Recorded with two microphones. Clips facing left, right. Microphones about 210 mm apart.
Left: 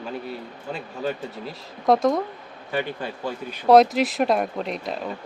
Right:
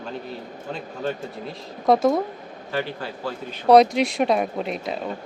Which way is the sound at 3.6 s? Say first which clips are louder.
Even; centre (ahead or behind).